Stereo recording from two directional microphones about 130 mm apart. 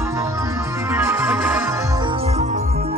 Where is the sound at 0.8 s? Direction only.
20° right (ahead or behind).